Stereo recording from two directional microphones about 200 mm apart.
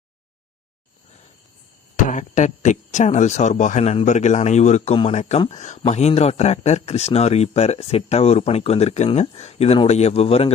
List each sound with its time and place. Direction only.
2.0 s speech: 40° left (ahead or behind)